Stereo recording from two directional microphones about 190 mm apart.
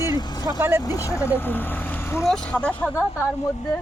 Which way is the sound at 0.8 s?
20° left (ahead or behind).